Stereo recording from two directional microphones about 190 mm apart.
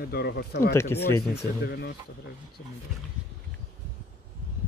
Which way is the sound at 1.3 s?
60° left (ahead or behind).